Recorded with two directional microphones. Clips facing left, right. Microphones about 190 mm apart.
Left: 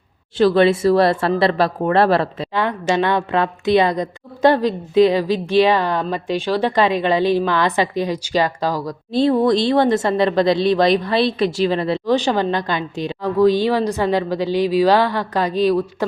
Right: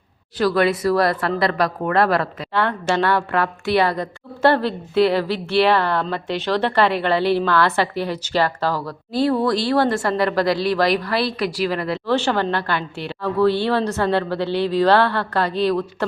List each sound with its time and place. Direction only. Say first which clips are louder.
0.3 s speech: left 4 dB; 25° left (ahead or behind)
2.6 s a woman's voice: left 1 dB; 15° left (ahead or behind)